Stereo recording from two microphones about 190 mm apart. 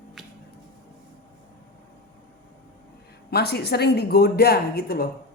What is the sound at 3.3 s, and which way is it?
A woman's voice, 60° left (ahead or behind).